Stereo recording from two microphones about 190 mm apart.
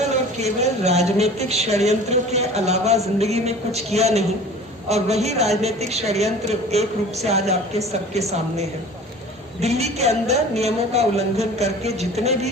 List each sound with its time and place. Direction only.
0.3 s a woman's voice: 35° right (ahead or behind)
9.6 s a woman's voice: 35° right (ahead or behind)